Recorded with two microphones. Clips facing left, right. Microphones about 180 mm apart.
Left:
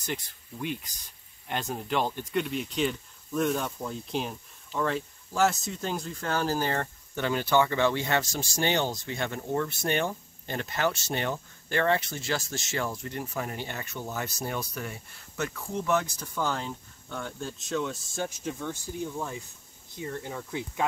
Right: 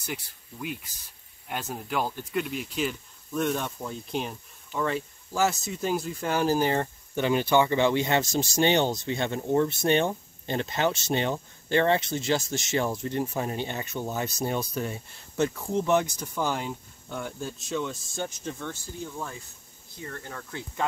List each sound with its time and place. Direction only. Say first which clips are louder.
0.0 s speech: left 1 dB; 10° right (ahead or behind); by 20.8 s 15° left (ahead or behind)